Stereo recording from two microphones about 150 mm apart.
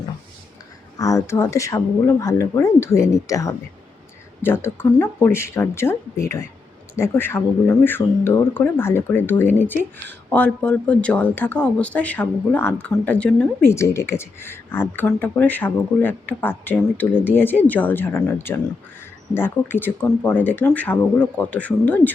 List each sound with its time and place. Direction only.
0.9 s speech: 20° left (ahead or behind)